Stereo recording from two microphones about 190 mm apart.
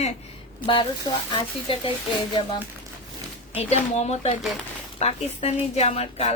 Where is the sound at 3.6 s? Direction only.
35° left (ahead or behind).